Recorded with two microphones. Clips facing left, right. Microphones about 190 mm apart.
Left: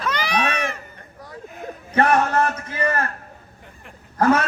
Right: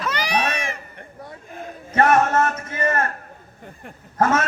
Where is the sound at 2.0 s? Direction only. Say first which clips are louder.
Right 1 dB; 25° right (ahead or behind).